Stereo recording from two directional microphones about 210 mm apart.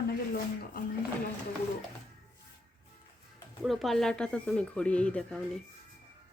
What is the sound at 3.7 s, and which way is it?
Speech, centre (ahead or behind).